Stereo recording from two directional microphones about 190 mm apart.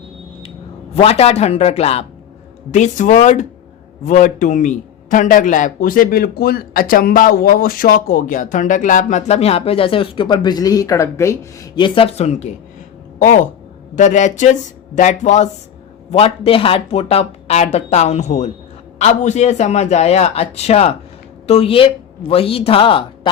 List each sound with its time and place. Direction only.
0.9 s a man's voice: 35° left (ahead or behind)